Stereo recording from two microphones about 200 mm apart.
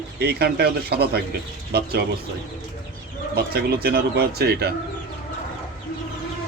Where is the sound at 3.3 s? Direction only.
50° right (ahead or behind).